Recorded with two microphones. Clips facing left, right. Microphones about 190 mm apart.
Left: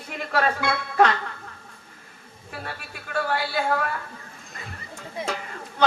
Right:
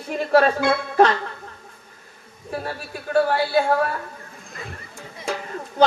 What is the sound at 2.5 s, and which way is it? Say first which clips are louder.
Speech: right 7 dB; 35° right (ahead or behind).